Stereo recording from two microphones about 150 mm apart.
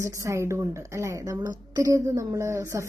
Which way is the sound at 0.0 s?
20° right (ahead or behind).